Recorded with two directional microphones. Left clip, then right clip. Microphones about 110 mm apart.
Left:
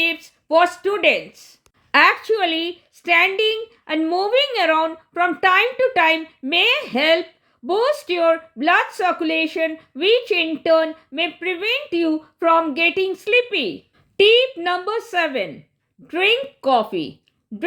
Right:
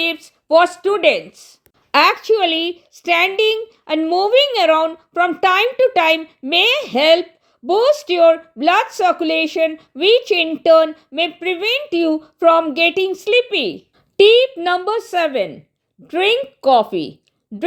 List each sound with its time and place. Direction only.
0.0 s a woman's voice: 25° right (ahead or behind)